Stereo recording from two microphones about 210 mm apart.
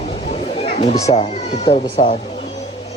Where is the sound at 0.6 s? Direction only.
30° left (ahead or behind).